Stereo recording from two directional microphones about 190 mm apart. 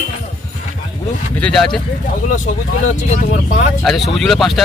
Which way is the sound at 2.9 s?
40° left (ahead or behind).